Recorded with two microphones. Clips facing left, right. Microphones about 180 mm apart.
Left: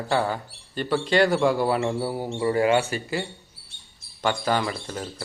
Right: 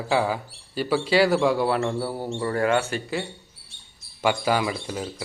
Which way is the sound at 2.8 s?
5° left (ahead or behind).